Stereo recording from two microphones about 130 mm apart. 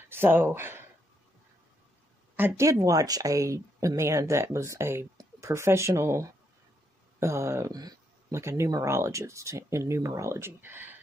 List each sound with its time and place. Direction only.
0.1 s speech: 15° right (ahead or behind)
2.3 s speech: 20° right (ahead or behind)